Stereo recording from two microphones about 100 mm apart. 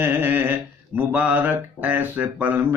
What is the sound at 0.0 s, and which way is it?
Mantra, 20° right (ahead or behind).